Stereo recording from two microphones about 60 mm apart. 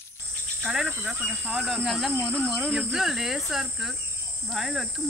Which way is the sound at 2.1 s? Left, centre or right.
Right.